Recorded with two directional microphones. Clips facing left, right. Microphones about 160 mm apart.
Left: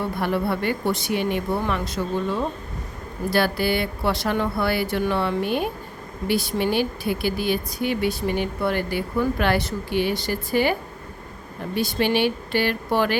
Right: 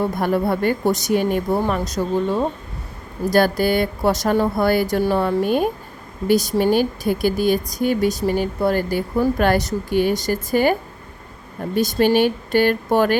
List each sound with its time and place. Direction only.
0.0 s speech: 45° right (ahead or behind)